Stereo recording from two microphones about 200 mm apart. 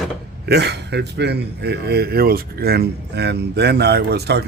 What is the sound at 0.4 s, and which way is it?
Speech, 55° right (ahead or behind).